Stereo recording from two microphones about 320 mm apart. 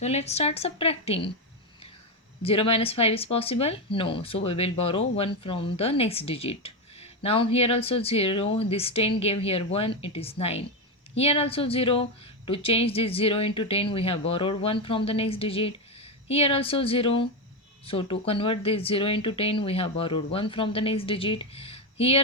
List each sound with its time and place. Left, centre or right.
0.0 s a woman's voice: centre
2.4 s speech: centre